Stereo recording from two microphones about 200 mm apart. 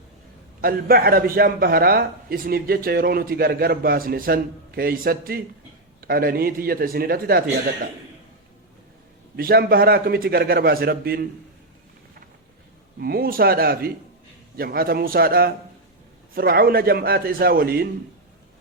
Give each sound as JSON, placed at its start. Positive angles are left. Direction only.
{"t": 0.6, "sound": "a man's voice", "side_deg": -45}
{"t": 9.3, "sound": "a man's voice", "side_deg": -50}
{"t": 13.0, "sound": "a man's voice", "side_deg": -50}